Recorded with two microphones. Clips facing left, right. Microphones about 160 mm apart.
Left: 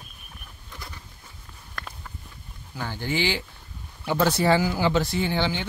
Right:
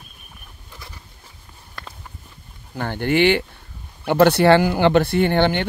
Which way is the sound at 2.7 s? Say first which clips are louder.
Right 8 dB; 60° right (ahead or behind).